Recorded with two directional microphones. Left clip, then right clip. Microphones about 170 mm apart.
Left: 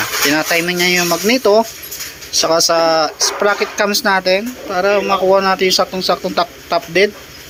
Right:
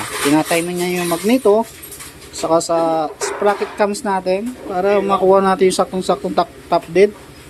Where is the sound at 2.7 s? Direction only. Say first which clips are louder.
Left 4 dB; 5° right (ahead or behind).